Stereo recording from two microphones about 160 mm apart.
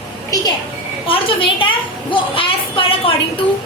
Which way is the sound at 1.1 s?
35° left (ahead or behind).